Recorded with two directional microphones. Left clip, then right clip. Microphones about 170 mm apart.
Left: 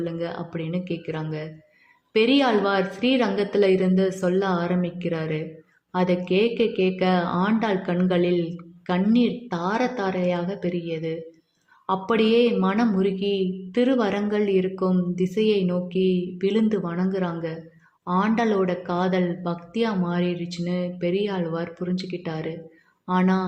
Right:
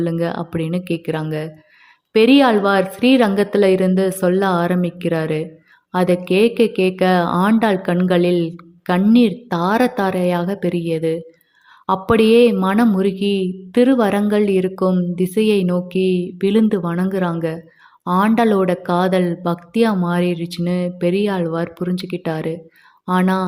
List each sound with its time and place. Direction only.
0.0 s a woman's voice: 35° right (ahead or behind)